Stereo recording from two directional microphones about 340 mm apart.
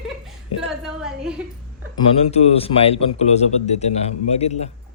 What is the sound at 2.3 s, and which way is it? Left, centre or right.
A man's voice, centre.